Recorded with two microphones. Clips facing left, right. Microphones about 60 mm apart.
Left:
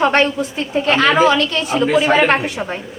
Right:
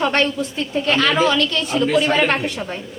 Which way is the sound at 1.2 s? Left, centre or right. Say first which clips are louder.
Left 4 dB; centre.